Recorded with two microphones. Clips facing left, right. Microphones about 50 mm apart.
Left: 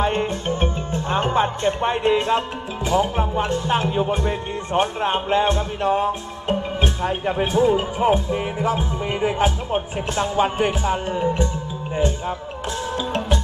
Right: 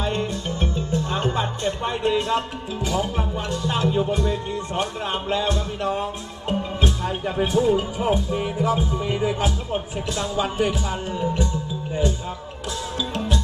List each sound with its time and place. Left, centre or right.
0.0 s speech: left
12.9 s music: left